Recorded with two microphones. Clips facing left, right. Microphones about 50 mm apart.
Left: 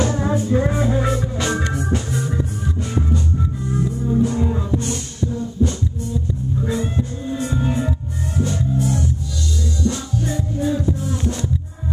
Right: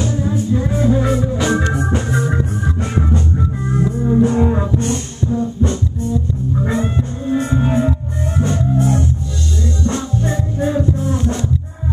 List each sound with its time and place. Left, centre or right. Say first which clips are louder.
0.0 s music: even; left
0.7 s music: right 4 dB; centre
1.8 s organ: right 4 dB; right
2.8 s music: right 2 dB; right
6.6 s music: right 3 dB; right